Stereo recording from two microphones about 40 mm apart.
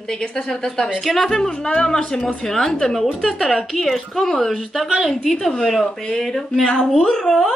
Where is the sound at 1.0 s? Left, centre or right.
Centre.